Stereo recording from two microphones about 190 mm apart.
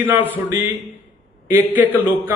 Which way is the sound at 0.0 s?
10° right (ahead or behind).